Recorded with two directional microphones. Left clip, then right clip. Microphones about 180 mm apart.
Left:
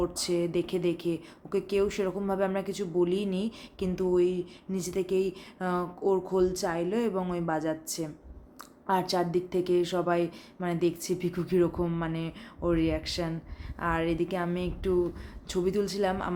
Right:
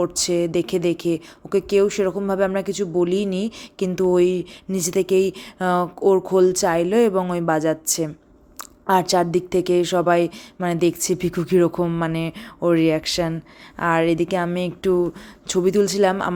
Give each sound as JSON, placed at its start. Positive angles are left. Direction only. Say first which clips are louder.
{"t": 0.0, "sound": "a woman's voice", "louder": "right 8 dB", "side_deg": -40}